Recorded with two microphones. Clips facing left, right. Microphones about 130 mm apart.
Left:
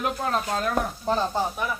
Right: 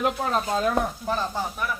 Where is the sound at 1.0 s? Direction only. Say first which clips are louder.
Left 3 dB; 30° left (ahead or behind).